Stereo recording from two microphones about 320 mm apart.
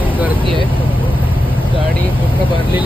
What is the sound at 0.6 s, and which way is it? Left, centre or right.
Vehicle, centre.